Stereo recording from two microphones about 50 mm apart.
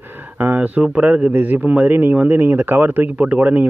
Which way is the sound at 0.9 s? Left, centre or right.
Right.